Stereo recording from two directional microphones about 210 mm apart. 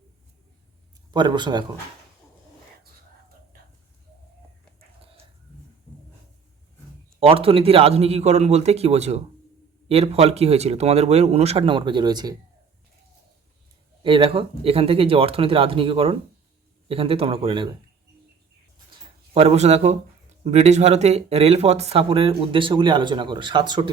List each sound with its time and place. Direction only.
1.1 s speech: 20° right (ahead or behind)
7.2 s speech: 25° right (ahead or behind)
14.0 s speech: 25° right (ahead or behind)
19.3 s a man's voice: 30° right (ahead or behind)